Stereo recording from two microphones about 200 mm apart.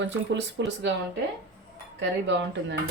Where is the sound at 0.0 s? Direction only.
60° right (ahead or behind).